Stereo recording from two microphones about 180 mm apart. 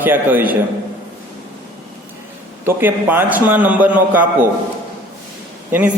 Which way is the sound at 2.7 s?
10° right (ahead or behind).